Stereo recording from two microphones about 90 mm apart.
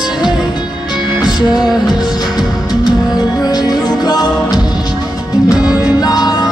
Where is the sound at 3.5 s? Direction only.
50° left (ahead or behind).